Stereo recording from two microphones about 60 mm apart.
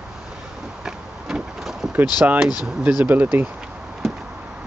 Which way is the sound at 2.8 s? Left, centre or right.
Right.